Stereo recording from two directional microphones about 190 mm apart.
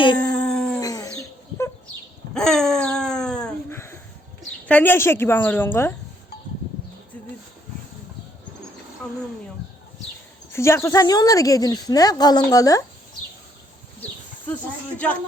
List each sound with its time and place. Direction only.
0.2 s dog: 5° left (ahead or behind)
0.8 s bird: 20° left (ahead or behind)
2.3 s a sound: centre (ahead or behind)
4.6 s a woman's voice: 10° left (ahead or behind)
10.5 s a woman's voice: 15° left (ahead or behind)
14.9 s a woman's voice: 5° left (ahead or behind)